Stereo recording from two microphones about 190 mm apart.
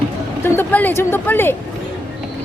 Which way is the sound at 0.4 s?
10° left (ahead or behind).